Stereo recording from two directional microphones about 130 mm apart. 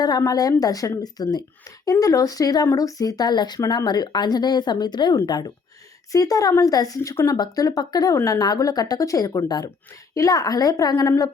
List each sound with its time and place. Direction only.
0.0 s speech: 30° left (ahead or behind)